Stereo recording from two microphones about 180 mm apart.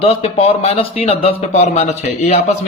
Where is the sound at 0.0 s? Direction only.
35° left (ahead or behind).